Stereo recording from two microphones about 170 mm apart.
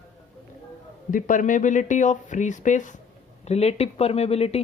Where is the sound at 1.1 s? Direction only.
50° left (ahead or behind).